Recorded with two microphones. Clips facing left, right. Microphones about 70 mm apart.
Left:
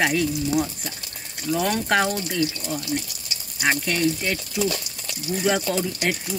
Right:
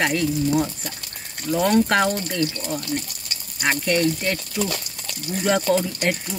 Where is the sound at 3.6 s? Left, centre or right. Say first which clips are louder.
Right 2 dB; centre.